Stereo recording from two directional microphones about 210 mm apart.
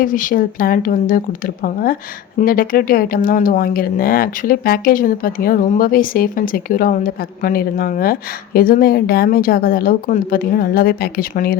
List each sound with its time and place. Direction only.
0.0 s speech: 40° left (ahead or behind)